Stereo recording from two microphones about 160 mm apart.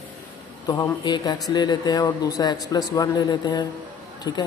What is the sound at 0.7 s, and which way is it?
Mantra, 25° left (ahead or behind).